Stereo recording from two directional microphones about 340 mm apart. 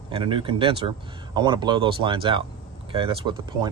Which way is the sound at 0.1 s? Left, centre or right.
Centre.